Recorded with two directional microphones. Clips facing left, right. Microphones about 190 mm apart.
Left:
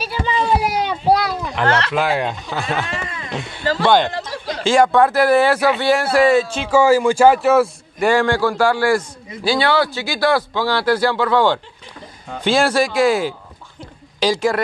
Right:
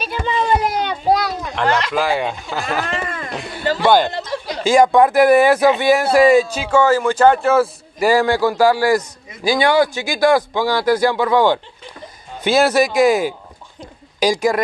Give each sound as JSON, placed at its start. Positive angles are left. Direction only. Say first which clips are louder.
{"t": 0.0, "sound": "a sound", "louder": "even", "side_deg": 5}
{"t": 1.7, "sound": "speech", "louder": "even", "side_deg": -15}
{"t": 2.0, "sound": "a man's voice", "louder": "even", "side_deg": 0}
{"t": 2.9, "sound": "speech", "louder": "right 3 dB", "side_deg": -50}
{"t": 3.3, "sound": "a man's voice", "louder": "even", "side_deg": 0}
{"t": 3.6, "sound": "speech", "louder": "right 1 dB", "side_deg": -15}
{"t": 6.7, "sound": "a man's voice", "louder": "left 2 dB", "side_deg": 10}